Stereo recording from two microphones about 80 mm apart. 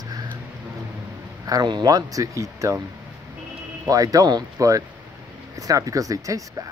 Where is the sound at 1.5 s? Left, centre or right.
Right.